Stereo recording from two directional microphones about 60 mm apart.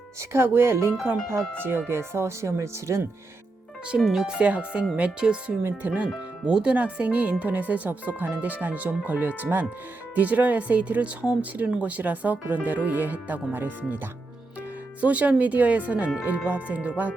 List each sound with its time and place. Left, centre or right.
0.2 s speech: right
1.9 s speech: right
3.9 s speech: centre
4.4 s speech: centre